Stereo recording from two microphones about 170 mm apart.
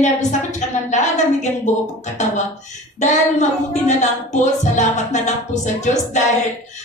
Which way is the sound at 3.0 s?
45° left (ahead or behind).